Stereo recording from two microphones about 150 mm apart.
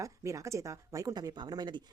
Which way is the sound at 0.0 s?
20° right (ahead or behind).